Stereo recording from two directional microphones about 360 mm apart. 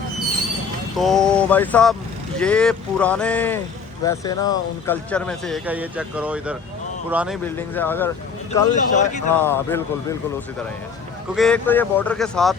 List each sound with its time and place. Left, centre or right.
0.9 s speech: centre
8.7 s speech: centre
9.3 s speech: centre
11.3 s speech: centre